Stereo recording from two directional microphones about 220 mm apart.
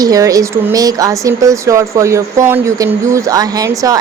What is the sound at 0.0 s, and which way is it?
Speech, 15° right (ahead or behind).